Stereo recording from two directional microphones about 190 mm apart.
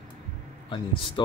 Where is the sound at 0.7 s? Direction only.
25° left (ahead or behind).